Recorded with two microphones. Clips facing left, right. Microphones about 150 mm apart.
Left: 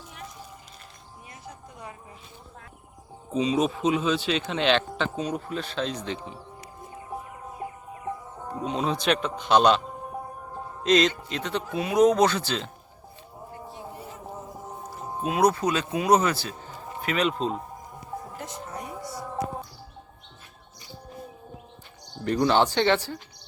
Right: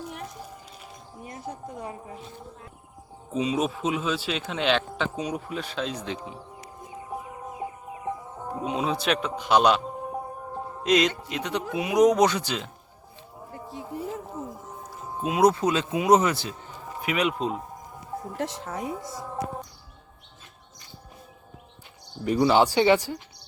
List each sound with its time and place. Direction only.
1.2 s a woman's voice: 35° right (ahead or behind)
3.3 s speech: 5° right (ahead or behind)
7.6 s music: 10° right (ahead or behind)
11.3 s speech: 15° right (ahead or behind)
15.2 s speech: 20° right (ahead or behind)
18.3 s speech: 90° right
22.2 s speech: 5° right (ahead or behind)